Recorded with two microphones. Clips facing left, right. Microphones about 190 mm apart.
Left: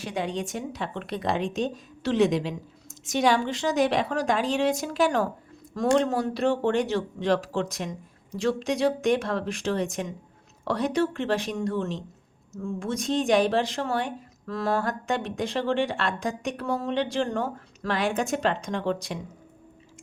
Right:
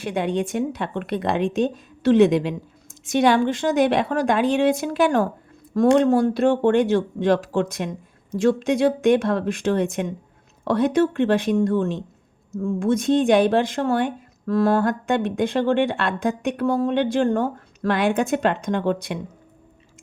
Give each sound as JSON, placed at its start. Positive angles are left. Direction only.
{"t": 0.0, "sound": "speech", "side_deg": -55}